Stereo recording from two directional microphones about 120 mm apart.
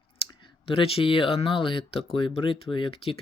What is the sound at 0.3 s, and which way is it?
Speech, 45° left (ahead or behind).